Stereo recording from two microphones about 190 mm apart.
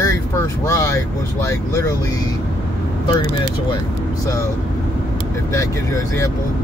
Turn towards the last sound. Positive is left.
turn(degrees=15)  # may be behind; listen again after turning